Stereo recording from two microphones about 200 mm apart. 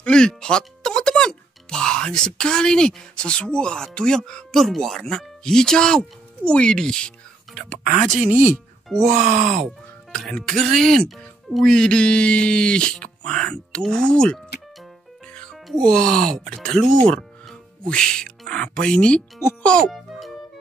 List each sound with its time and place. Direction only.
0.0 s speech: 5° left (ahead or behind)
7.5 s whispering: centre (ahead or behind)
8.2 s speech: 5° right (ahead or behind)
9.0 s speech: 35° right (ahead or behind)
10.1 s speech: 5° left (ahead or behind)